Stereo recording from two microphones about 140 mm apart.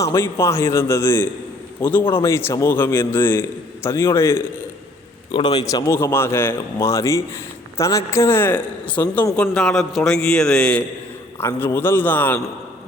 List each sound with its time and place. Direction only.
0.0 s a man's voice: 20° left (ahead or behind)
5.3 s a man's voice: 35° left (ahead or behind); by 12.4 s 15° left (ahead or behind)